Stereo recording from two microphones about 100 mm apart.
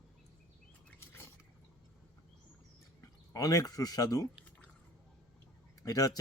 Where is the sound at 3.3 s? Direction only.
35° left (ahead or behind).